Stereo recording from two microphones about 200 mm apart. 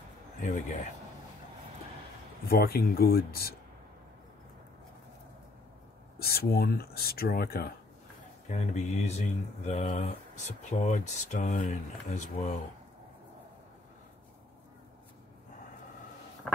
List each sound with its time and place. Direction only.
0.4 s speech: 40° left (ahead or behind)
2.4 s speech: 50° left (ahead or behind)
6.1 s speech: 50° left (ahead or behind)
8.5 s speech: 35° left (ahead or behind)
16.5 s a sound: 5° left (ahead or behind)